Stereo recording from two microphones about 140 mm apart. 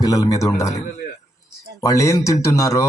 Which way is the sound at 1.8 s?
25° left (ahead or behind).